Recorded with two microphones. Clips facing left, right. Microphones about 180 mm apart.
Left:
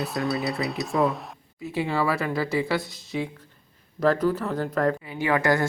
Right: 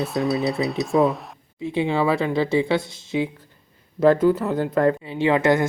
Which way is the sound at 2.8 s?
Centre (ahead or behind).